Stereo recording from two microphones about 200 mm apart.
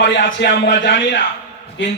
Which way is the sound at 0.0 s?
60° left (ahead or behind).